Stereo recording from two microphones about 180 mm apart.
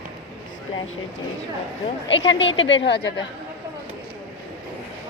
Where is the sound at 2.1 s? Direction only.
90° left; by 3.1 s 75° left (ahead or behind).